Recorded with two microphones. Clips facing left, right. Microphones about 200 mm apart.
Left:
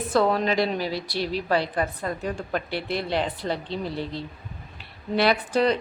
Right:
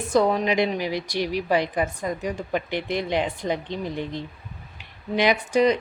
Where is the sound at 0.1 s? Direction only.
15° right (ahead or behind).